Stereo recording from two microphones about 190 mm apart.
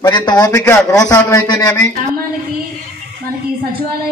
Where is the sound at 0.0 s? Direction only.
20° left (ahead or behind).